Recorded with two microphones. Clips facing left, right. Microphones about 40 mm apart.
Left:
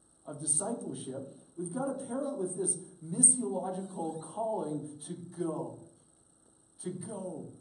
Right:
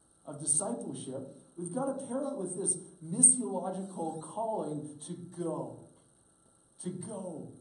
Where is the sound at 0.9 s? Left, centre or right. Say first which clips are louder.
Even; centre.